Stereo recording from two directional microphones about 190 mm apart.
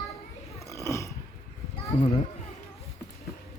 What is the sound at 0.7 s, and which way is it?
Burping, 15° left (ahead or behind).